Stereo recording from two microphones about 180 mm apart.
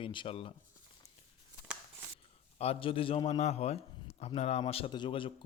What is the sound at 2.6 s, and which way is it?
A man's voice, 35° left (ahead or behind).